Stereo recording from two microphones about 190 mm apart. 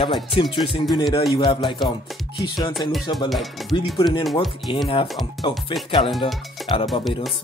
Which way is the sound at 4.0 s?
25° left (ahead or behind).